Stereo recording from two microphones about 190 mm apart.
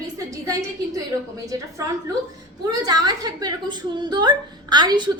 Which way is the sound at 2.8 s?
20° right (ahead or behind).